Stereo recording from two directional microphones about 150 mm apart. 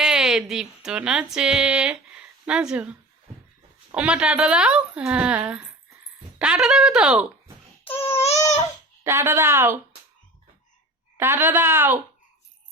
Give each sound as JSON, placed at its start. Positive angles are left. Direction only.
{"t": 0.0, "sound": "speech", "side_deg": -5}
{"t": 3.9, "sound": "a woman's voice", "side_deg": -10}
{"t": 7.9, "sound": "a sound", "side_deg": 40}
{"t": 9.0, "sound": "a woman's voice", "side_deg": -15}
{"t": 11.2, "sound": "a woman's voice", "side_deg": -15}